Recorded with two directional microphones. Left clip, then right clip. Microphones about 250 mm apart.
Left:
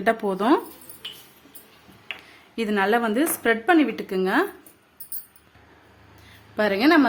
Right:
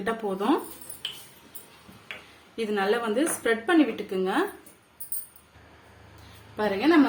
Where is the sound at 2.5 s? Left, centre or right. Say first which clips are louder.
Left 4 dB; left.